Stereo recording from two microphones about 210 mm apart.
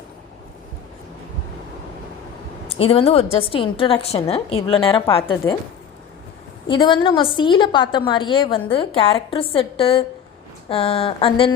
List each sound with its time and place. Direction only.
2.6 s a woman's voice: 25° left (ahead or behind)
6.7 s a woman's voice: 20° left (ahead or behind)